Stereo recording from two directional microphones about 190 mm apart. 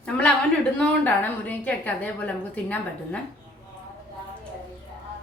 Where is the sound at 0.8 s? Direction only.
5° left (ahead or behind).